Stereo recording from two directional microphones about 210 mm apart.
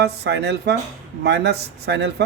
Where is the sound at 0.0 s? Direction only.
55° right (ahead or behind).